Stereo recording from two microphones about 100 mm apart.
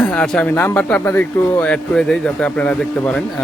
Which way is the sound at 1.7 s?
5° left (ahead or behind).